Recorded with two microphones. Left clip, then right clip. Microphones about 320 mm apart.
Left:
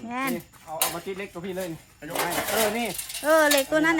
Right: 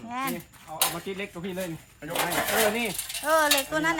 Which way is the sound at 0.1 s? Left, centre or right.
Centre.